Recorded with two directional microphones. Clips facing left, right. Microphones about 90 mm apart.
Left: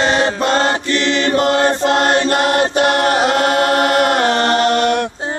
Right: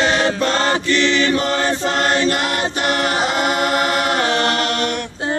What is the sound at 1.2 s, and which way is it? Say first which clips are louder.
Chant: left 4 dB; 45° left (ahead or behind).